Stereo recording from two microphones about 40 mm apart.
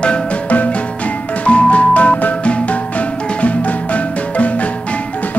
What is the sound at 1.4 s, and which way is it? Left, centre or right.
Music, left.